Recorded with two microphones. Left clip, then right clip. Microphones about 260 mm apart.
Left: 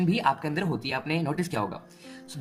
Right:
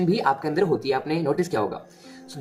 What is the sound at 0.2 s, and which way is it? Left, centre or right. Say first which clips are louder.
Speech: right 4 dB; left.